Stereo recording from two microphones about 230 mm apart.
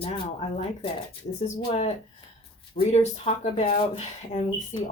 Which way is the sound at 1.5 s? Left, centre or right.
Left.